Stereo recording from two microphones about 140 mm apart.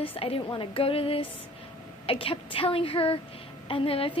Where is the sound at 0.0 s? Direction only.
40° left (ahead or behind).